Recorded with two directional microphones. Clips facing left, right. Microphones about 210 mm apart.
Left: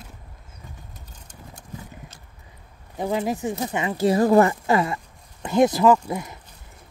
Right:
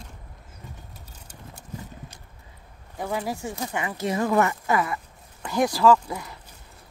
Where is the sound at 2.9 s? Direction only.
20° left (ahead or behind).